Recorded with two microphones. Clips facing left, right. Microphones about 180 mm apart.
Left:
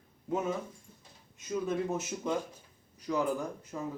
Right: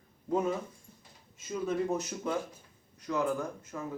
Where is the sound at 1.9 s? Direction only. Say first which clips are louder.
Even; 5° left (ahead or behind).